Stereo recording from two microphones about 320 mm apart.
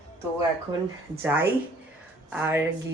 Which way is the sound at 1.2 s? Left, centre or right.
Centre.